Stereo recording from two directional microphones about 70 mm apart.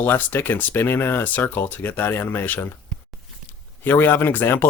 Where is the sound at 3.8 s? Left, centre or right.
Left.